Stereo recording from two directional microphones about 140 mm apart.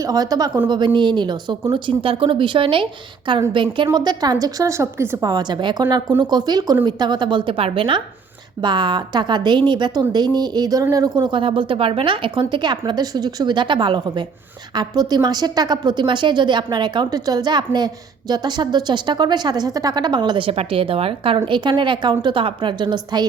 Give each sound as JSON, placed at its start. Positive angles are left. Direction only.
{"t": 0.0, "sound": "a woman's voice", "side_deg": -25}